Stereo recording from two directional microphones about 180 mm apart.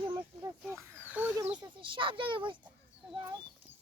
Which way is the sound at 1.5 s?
30° right (ahead or behind).